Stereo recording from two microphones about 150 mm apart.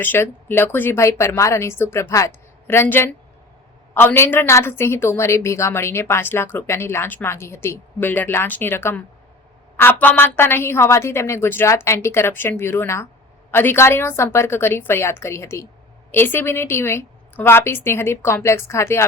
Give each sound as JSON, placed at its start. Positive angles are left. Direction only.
{"t": 0.0, "sound": "a woman's voice", "side_deg": 15}